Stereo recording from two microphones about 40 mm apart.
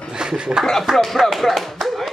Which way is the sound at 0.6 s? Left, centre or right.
Centre.